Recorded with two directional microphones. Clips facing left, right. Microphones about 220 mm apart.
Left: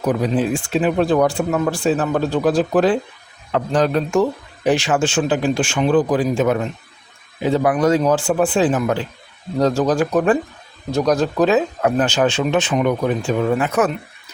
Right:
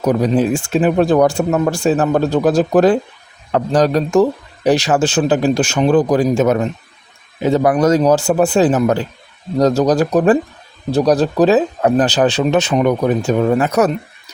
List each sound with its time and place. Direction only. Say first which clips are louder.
0.0 s speech: right 4 dB; 40° right (ahead or behind)